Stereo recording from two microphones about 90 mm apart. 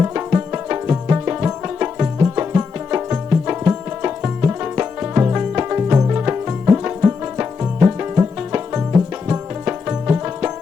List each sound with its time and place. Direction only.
0.0 s tabla: 20° right (ahead or behind)
2.2 s music: 20° right (ahead or behind)
10.1 s music: 15° right (ahead or behind)